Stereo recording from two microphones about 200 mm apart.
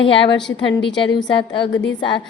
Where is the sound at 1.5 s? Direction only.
20° left (ahead or behind).